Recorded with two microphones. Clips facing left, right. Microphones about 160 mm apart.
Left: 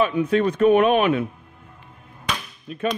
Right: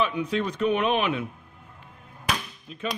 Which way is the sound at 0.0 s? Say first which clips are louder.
Left 7 dB; 50° left (ahead or behind).